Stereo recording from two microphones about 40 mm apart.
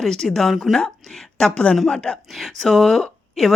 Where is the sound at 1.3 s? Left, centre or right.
Centre.